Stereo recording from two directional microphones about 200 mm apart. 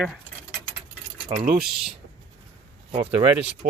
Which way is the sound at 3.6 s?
40° right (ahead or behind).